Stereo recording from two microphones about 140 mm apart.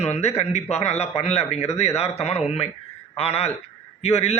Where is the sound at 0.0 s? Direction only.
50° left (ahead or behind).